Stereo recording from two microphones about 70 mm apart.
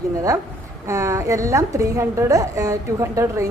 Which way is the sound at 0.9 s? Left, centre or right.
Right.